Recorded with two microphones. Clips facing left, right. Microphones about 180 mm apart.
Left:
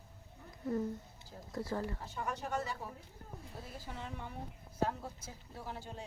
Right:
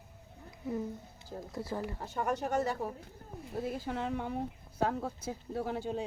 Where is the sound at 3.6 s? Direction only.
80° right.